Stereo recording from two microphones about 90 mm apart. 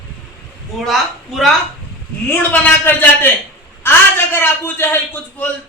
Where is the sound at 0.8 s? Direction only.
Centre (ahead or behind).